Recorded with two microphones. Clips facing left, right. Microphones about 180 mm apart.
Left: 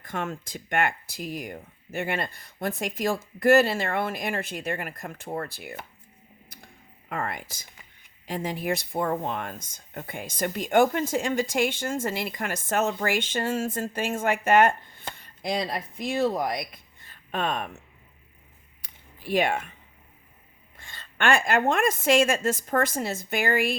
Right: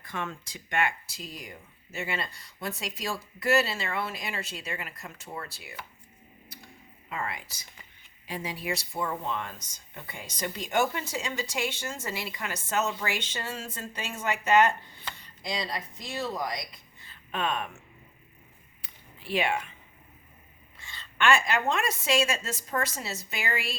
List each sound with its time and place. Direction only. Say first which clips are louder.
0.0 s speech: left 4 dB; 50° left (ahead or behind)
7.1 s speech: left 4 dB; 50° left (ahead or behind)
19.3 s speech: left 4 dB; 45° left (ahead or behind)
20.7 s speech: even; 50° left (ahead or behind)